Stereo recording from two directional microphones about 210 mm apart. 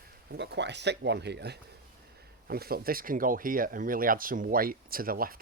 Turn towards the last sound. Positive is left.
turn(degrees=-45)  # may be behind; listen again after turning